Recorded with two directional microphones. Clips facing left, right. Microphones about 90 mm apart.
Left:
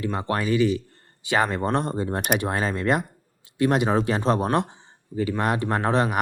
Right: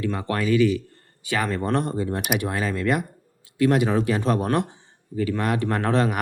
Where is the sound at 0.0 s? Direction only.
25° left (ahead or behind).